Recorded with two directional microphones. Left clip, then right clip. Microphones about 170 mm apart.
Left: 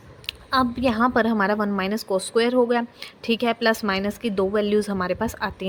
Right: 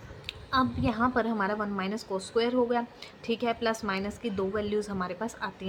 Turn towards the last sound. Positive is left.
turn(degrees=60)  # may be behind; listen again after turning